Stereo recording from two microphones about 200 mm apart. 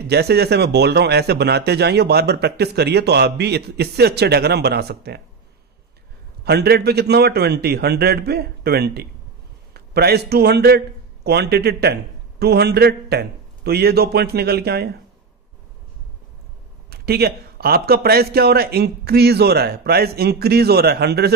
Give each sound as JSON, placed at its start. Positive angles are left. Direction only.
{"t": 0.0, "sound": "a man's voice", "side_deg": -55}
{"t": 6.4, "sound": "a man's voice", "side_deg": -55}
{"t": 16.9, "sound": "a man's voice", "side_deg": -50}